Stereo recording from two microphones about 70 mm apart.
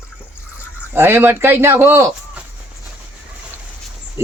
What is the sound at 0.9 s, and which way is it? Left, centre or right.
Speech, right.